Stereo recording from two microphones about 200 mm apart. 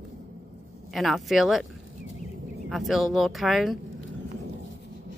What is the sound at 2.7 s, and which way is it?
Speech, centre (ahead or behind).